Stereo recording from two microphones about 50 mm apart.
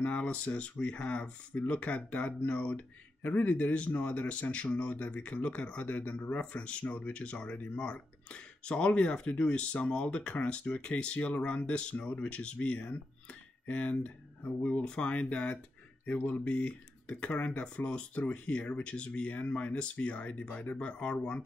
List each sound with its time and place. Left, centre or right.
0.0 s speech: left